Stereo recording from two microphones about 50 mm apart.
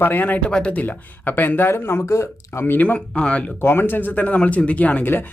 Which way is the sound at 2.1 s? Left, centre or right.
Left.